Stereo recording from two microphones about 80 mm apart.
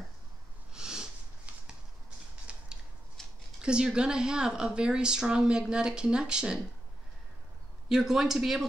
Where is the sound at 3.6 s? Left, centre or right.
Centre.